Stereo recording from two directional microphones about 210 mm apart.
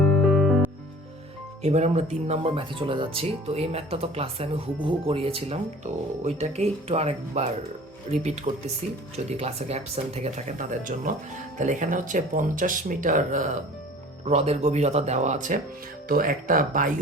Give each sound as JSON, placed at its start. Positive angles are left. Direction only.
{"t": 0.3, "sound": "music", "side_deg": 0}
{"t": 1.6, "sound": "speech", "side_deg": -30}